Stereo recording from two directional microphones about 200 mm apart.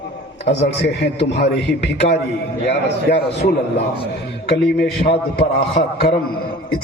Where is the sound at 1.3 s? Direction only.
55° left (ahead or behind).